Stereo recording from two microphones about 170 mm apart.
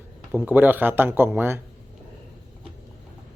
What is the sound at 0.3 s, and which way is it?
Speech, 10° right (ahead or behind).